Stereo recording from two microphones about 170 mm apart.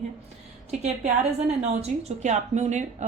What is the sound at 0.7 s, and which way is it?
Speech, 45° right (ahead or behind).